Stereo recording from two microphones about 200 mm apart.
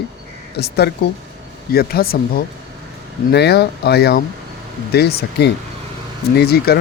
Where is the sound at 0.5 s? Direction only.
55° left (ahead or behind).